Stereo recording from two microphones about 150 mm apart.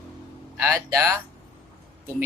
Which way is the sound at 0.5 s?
20° right (ahead or behind).